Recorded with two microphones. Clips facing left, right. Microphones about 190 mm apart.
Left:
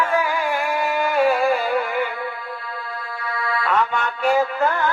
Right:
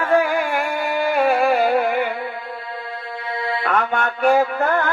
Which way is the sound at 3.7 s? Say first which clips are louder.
Right 1 dB; 55° right (ahead or behind).